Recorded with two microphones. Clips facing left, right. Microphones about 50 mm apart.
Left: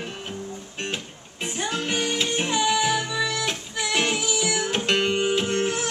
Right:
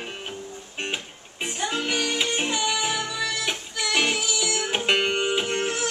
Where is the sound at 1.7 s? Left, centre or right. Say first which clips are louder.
Left 1 dB; centre.